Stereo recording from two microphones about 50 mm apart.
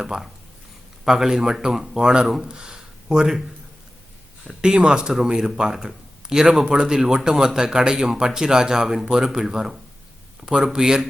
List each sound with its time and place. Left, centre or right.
0.0 s speech: centre
2.5 s a sound: centre
4.4 s speech: centre